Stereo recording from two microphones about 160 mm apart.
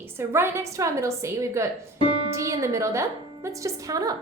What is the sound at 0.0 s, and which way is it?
A woman's voice, 15° right (ahead or behind).